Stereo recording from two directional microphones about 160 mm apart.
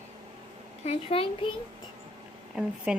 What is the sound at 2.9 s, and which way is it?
Speech, 5° right (ahead or behind).